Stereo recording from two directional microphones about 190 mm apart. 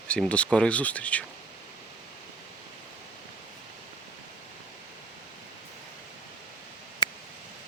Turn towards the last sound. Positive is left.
turn(degrees=20)  # may be behind; listen again after turning